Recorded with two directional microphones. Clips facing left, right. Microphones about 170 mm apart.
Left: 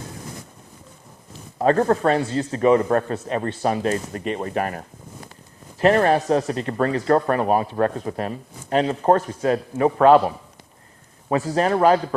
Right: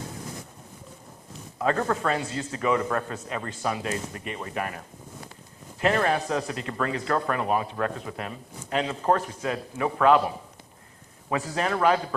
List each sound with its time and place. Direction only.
1.5 s speech: 35° left (ahead or behind)
5.8 s speech: 40° left (ahead or behind)
11.3 s speech: 40° left (ahead or behind)